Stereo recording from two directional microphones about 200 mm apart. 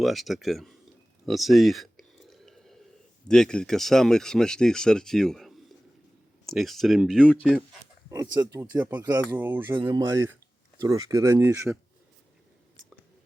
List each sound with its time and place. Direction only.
0.0 s speech: centre (ahead or behind)
1.2 s a sound: centre (ahead or behind)
3.2 s speech: 5° left (ahead or behind)
8.1 s speech: 15° right (ahead or behind)